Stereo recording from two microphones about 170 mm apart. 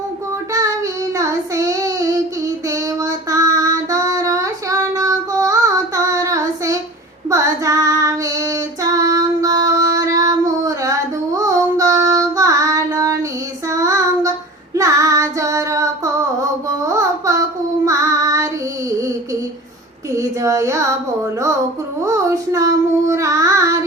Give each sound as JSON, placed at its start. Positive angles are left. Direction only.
{"t": 0.5, "sound": "child singing", "side_deg": -20}
{"t": 18.9, "sound": "a sound", "side_deg": -20}
{"t": 22.0, "sound": "child singing", "side_deg": -20}